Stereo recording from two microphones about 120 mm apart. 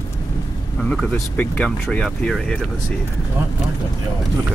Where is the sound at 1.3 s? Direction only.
15° left (ahead or behind).